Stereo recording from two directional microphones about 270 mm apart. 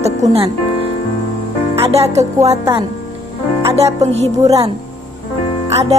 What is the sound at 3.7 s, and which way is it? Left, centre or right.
Speech, right.